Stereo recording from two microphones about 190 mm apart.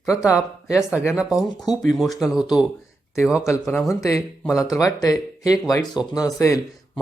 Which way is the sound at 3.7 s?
Centre (ahead or behind).